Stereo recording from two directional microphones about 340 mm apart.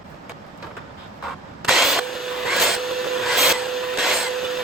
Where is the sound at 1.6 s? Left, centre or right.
Centre.